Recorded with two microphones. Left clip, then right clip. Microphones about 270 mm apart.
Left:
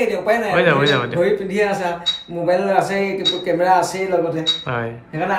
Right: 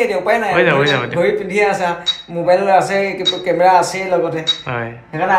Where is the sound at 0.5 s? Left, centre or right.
Centre.